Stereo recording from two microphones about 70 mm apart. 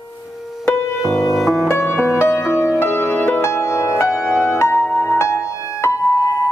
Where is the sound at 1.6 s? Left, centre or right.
Left.